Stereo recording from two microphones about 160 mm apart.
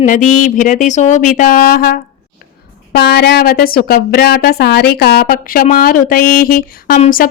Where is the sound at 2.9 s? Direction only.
75° left (ahead or behind).